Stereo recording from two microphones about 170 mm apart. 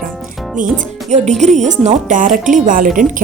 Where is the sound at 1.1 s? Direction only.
45° right (ahead or behind).